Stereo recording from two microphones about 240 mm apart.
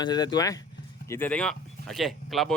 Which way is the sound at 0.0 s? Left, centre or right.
Centre.